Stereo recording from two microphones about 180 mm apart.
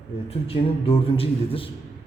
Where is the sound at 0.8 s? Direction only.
30° left (ahead or behind).